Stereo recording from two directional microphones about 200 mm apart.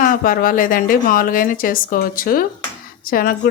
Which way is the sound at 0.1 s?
45° left (ahead or behind).